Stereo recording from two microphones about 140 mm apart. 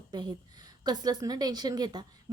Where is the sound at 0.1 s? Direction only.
30° right (ahead or behind).